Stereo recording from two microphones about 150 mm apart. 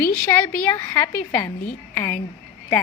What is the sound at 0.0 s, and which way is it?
A woman's voice, 10° left (ahead or behind).